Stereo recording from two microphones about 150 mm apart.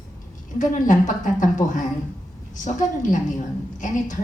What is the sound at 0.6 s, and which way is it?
Speech, 55° left (ahead or behind).